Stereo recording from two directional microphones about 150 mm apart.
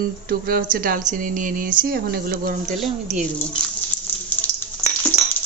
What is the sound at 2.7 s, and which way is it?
Speech, centre (ahead or behind).